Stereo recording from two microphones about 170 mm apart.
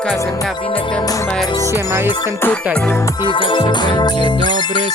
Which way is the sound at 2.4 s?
10° left (ahead or behind).